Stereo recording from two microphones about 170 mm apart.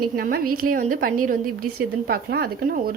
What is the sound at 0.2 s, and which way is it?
Speech, 60° right (ahead or behind).